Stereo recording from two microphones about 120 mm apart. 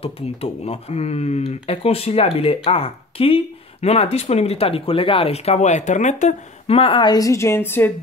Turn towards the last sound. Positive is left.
turn(degrees=20)  # may be behind; listen again after turning